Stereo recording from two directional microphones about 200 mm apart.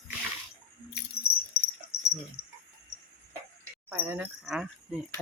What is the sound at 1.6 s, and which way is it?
Dog, 50° left (ahead or behind).